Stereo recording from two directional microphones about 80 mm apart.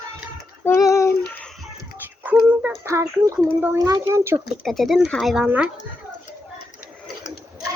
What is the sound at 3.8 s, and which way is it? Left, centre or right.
Speech, right.